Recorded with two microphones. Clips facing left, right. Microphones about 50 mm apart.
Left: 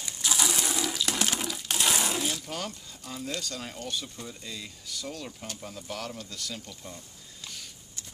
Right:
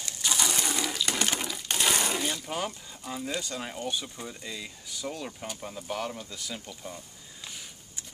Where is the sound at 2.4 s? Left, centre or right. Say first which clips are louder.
Right 3 dB; centre.